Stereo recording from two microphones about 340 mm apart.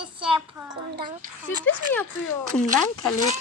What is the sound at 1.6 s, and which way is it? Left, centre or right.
Speech, centre.